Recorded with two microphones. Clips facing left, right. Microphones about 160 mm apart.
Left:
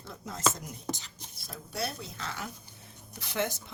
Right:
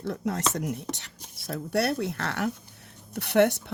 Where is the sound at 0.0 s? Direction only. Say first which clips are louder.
Right 4 dB; 70° right (ahead or behind).